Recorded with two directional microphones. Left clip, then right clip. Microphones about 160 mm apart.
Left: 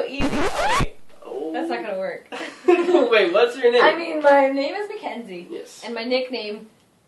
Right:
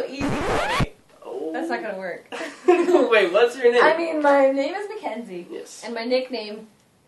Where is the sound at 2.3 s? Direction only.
10° left (ahead or behind).